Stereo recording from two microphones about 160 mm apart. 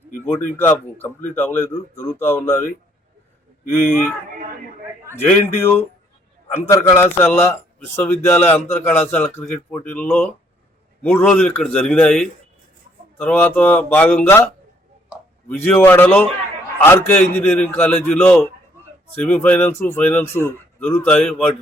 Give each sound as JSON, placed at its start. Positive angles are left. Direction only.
{"t": 0.3, "sound": "speech", "side_deg": 10}
{"t": 5.1, "sound": "speech", "side_deg": 15}
{"t": 6.9, "sound": "speech", "side_deg": 15}